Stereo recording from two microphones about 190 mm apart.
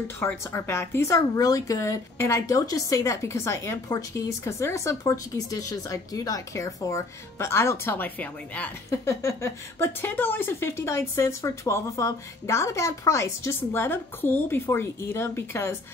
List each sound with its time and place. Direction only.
0.2 s speech: 10° left (ahead or behind)